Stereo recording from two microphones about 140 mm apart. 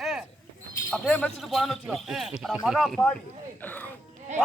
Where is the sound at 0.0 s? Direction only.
5° right (ahead or behind).